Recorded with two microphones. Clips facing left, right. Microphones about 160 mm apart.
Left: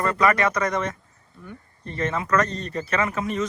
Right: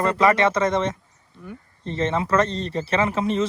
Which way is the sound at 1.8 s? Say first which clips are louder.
Right 3 dB; 25° right (ahead or behind).